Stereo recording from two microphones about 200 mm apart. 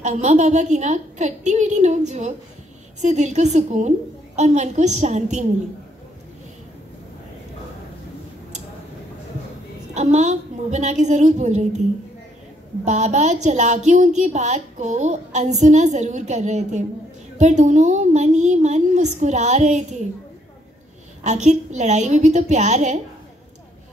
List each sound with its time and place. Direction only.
0.0 s a woman's voice: 35° right (ahead or behind)
9.9 s a woman's voice: 35° right (ahead or behind)
12.8 s a woman's voice: 35° right (ahead or behind)
21.2 s a woman's voice: 35° right (ahead or behind)